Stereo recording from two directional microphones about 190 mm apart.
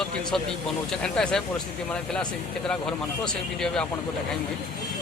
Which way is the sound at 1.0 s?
5° left (ahead or behind).